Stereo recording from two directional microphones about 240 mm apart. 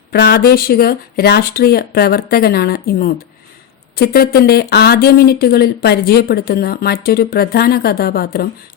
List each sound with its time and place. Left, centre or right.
0.1 s speech: left